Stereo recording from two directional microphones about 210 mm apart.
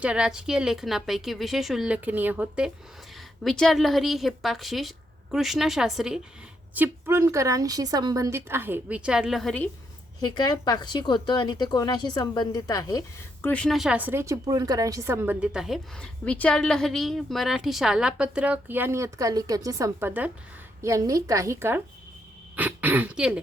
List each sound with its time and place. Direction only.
0.0 s a woman's voice: 5° right (ahead or behind)
10.2 s speech: 20° left (ahead or behind)
13.5 s a woman's voice: 5° left (ahead or behind)